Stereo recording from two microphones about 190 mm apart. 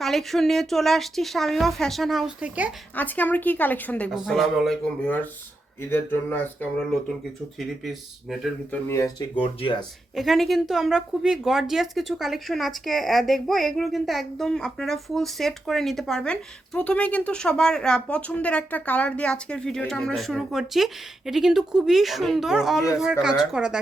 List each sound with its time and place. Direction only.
0.0 s a woman's voice: centre (ahead or behind)
2.9 s a woman's voice: 10° left (ahead or behind)
7.9 s a woman's voice: centre (ahead or behind)
8.9 s a woman's voice: 15° left (ahead or behind)
9.4 s speech: 30° left (ahead or behind)
10.2 s a woman's voice: centre (ahead or behind)